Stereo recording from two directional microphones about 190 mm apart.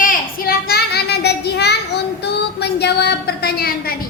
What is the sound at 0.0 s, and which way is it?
Child singing, 50° left (ahead or behind).